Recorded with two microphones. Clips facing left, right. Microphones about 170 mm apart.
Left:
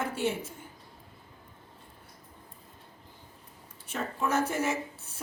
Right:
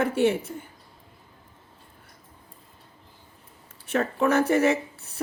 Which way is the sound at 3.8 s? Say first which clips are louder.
Right 9 dB; 70° right (ahead or behind).